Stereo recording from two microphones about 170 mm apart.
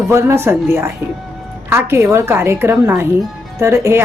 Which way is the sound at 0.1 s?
15° right (ahead or behind).